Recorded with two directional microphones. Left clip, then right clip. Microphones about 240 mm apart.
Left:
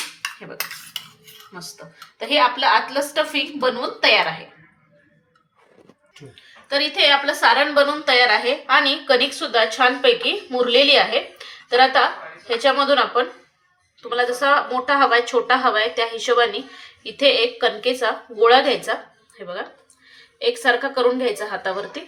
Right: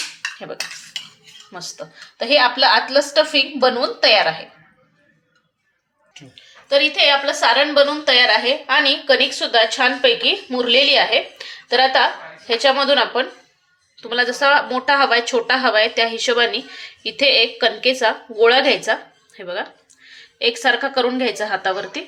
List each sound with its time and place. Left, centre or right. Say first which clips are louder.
2.1 s a woman's voice: right 3 dB; right
6.7 s a woman's voice: right 2 dB; right
20.4 s a woman's voice: right 1 dB; right